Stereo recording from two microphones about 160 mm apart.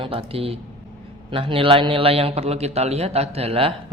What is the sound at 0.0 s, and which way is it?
A man's voice, 35° right (ahead or behind).